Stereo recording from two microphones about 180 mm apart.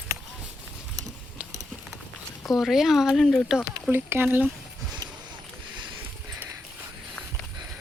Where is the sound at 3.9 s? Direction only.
10° right (ahead or behind).